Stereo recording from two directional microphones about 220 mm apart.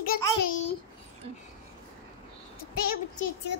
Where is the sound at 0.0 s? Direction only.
40° left (ahead or behind).